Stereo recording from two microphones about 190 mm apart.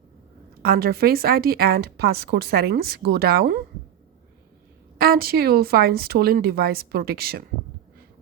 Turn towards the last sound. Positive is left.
turn(degrees=-55)  # may be behind; listen again after turning